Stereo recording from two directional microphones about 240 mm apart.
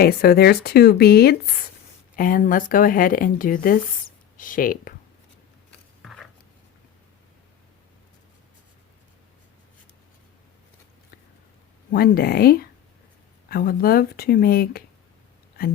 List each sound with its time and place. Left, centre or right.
0.0 s speech: left
6.0 s a sound: centre
11.9 s speech: left